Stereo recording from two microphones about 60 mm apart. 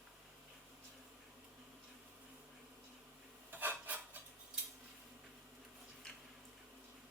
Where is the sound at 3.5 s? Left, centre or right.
Right.